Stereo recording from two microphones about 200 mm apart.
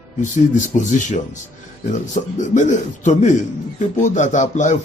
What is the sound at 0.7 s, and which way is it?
A man's voice, 40° left (ahead or behind).